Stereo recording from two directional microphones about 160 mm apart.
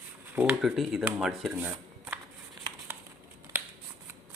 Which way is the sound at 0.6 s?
Centre (ahead or behind).